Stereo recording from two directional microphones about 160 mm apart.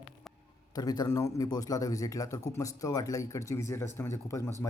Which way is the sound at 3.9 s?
15° left (ahead or behind).